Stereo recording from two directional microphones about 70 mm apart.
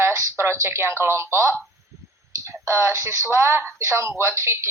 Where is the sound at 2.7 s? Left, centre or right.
Right.